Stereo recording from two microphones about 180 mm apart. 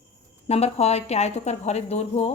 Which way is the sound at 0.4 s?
35° left (ahead or behind).